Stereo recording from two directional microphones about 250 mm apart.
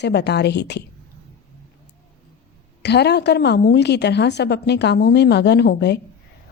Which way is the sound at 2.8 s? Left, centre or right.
Left.